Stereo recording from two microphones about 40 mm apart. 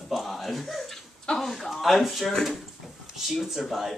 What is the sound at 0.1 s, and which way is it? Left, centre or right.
A child's voice, centre.